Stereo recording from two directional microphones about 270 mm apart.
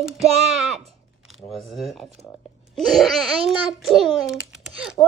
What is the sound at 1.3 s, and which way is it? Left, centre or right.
Speech, centre.